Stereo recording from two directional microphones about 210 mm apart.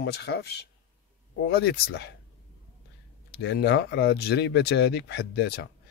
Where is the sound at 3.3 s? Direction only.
50° left (ahead or behind).